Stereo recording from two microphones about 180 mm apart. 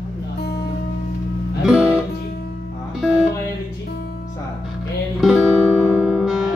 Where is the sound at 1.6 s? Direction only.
5° right (ahead or behind).